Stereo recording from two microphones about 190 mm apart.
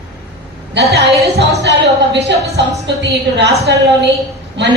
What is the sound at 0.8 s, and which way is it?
A woman's voice, 65° right (ahead or behind).